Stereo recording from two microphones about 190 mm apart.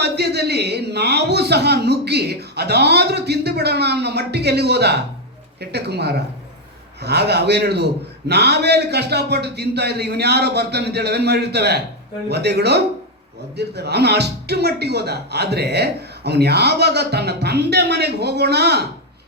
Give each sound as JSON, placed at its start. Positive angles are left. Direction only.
{"t": 0.0, "sound": "speech", "side_deg": -60}